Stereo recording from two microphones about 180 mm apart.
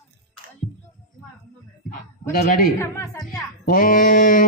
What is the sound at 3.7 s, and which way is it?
Mantra, 50° left (ahead or behind).